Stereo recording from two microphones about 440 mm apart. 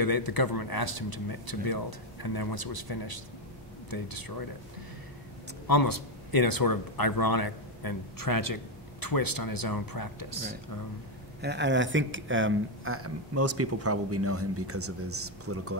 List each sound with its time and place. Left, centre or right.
0.0 s speech: left
5.7 s speech: left
11.4 s speech: right